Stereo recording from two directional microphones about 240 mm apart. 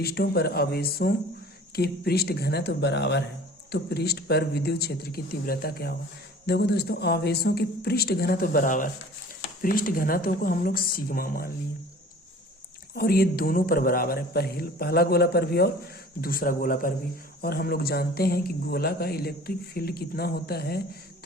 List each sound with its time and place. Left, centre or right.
0.0 s speech: left
12.9 s speech: left